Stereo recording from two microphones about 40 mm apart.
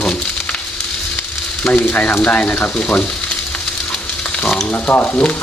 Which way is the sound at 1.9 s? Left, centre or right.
Left.